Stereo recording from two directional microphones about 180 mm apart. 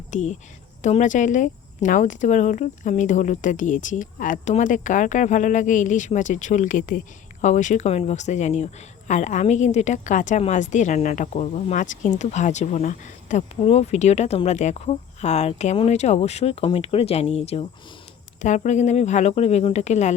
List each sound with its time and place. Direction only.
0.1 s a woman's voice: 40° left (ahead or behind)